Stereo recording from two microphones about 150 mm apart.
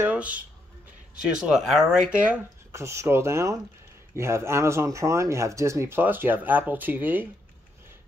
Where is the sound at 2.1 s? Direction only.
10° right (ahead or behind).